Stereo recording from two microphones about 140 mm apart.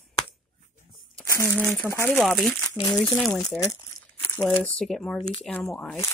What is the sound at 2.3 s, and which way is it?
Speech, centre (ahead or behind).